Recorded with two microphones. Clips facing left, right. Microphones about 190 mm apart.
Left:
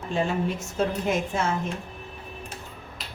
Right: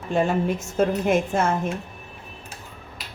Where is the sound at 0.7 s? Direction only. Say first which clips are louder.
Right 5 dB; 55° right (ahead or behind).